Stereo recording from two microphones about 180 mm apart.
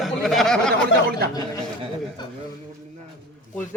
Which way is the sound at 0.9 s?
90° left.